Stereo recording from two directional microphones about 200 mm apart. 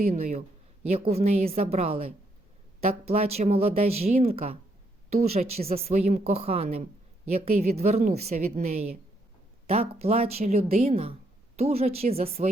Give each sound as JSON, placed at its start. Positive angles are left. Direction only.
{"t": 0.9, "sound": "speech", "side_deg": -30}